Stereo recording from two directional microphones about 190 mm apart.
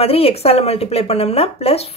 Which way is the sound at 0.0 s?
30° left (ahead or behind).